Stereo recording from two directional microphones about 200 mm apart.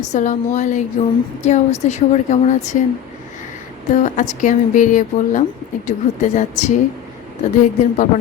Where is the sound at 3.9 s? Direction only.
40° left (ahead or behind).